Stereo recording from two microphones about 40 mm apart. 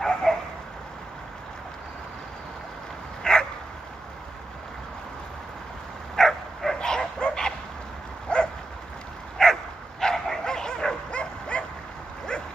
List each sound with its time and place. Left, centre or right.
0.0 s bow-wow: centre
3.3 s dog: centre
6.1 s dog: centre; by 8.4 s left
9.4 s dog: centre
11.1 s dog: left